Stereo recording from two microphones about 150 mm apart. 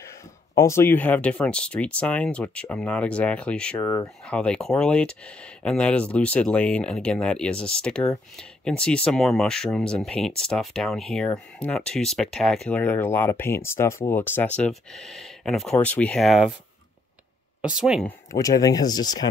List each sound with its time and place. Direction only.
0.6 s speech: 20° left (ahead or behind); by 16.5 s centre (ahead or behind)
17.6 s speech: 5° right (ahead or behind)
18.0 s speech: 20° left (ahead or behind)